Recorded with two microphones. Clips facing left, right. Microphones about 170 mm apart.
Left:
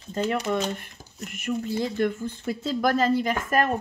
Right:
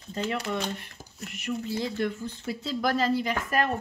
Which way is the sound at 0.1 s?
45° left (ahead or behind).